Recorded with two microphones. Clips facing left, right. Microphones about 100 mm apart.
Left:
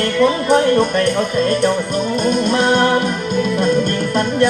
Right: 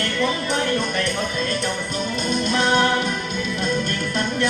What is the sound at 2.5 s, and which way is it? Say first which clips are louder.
Music: left 2 dB; 45° left (ahead or behind).